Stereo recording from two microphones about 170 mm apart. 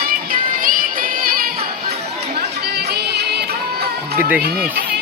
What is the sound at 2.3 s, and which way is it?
Music, 70° right (ahead or behind).